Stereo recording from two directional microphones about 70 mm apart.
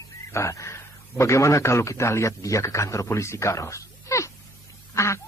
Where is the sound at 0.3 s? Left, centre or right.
Left.